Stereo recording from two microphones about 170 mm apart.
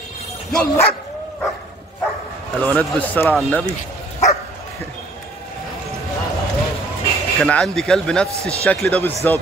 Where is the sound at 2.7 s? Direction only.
10° left (ahead or behind).